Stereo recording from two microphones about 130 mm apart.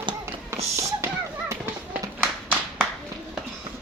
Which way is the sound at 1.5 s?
20° right (ahead or behind).